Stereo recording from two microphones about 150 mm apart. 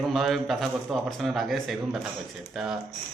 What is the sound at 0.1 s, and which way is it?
A man's voice, centre (ahead or behind).